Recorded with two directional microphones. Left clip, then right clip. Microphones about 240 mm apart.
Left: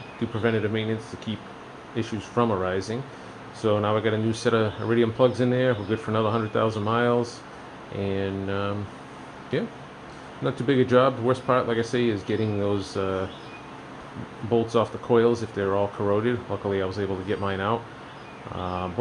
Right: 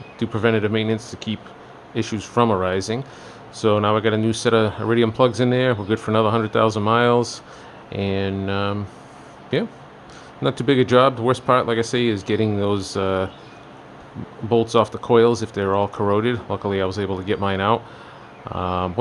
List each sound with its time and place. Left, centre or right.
0.3 s speech: right
14.5 s speech: right